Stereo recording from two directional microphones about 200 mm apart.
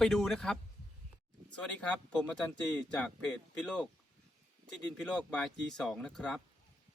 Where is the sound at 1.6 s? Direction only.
5° left (ahead or behind).